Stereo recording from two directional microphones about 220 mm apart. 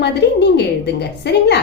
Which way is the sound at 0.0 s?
50° left (ahead or behind).